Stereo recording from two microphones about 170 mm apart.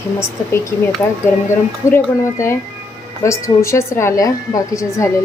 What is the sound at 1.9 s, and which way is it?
A woman's voice, 15° left (ahead or behind).